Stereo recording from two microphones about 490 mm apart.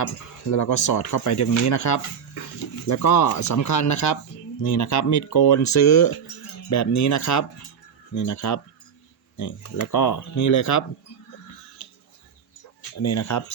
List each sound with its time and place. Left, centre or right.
0.5 s speech: left
13.0 s speech: left